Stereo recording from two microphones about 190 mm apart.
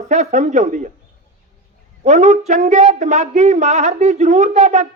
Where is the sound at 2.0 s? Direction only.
40° right (ahead or behind).